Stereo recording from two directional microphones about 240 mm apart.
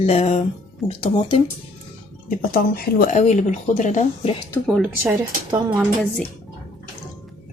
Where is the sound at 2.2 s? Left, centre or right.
Left.